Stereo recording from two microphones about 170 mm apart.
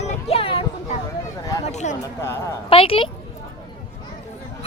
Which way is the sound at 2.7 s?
35° left (ahead or behind).